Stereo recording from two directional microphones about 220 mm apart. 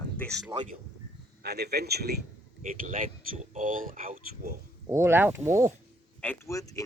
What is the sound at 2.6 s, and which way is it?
Speech, 35° right (ahead or behind).